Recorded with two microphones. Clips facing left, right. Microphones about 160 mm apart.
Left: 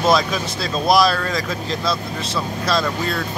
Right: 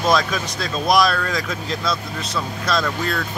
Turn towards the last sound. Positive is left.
turn(degrees=0)  # may be behind; listen again after turning